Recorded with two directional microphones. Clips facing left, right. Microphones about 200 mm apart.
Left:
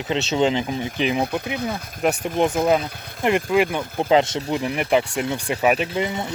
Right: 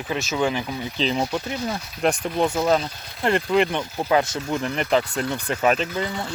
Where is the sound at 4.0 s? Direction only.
25° left (ahead or behind).